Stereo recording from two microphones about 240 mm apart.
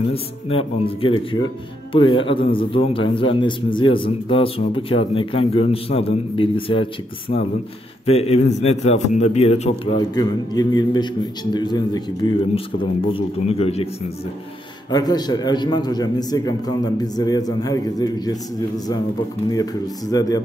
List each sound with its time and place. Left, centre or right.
0.1 s a man's voice: left
14.9 s a man's voice: centre
19.5 s a man's voice: centre